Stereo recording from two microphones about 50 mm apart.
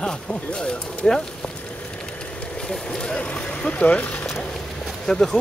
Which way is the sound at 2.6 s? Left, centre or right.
Centre.